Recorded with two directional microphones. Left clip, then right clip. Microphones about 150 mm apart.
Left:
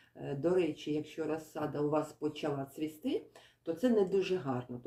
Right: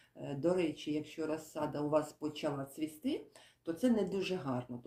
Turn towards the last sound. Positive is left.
turn(degrees=-15)  # may be behind; listen again after turning